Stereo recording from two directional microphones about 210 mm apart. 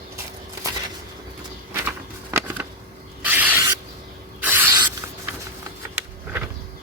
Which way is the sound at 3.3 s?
10° right (ahead or behind).